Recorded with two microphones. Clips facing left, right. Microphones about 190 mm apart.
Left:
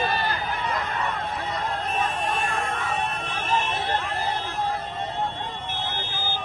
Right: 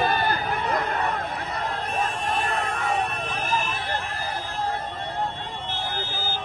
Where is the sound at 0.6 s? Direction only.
60° right (ahead or behind).